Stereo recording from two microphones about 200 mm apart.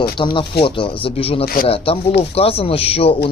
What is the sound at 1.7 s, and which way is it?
Speech, 30° left (ahead or behind).